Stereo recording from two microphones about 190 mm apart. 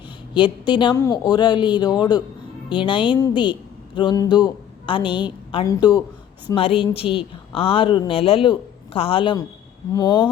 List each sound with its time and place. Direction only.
0.3 s a woman's voice: 25° left (ahead or behind)